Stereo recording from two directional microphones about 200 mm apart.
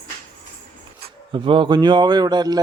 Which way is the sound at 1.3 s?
25° right (ahead or behind).